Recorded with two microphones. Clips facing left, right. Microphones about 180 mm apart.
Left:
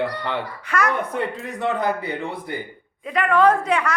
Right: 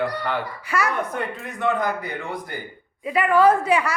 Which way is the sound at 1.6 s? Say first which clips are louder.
Even; 30° left (ahead or behind).